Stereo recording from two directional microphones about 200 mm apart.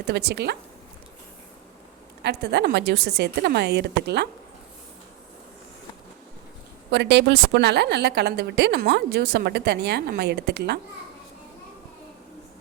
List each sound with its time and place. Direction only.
0.1 s a woman's voice: 55° right (ahead or behind)
2.2 s a woman's voice: 55° right (ahead or behind)
6.9 s a woman's voice: 55° right (ahead or behind)